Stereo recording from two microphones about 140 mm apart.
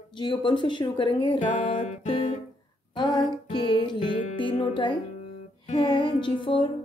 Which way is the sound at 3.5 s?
35° left (ahead or behind).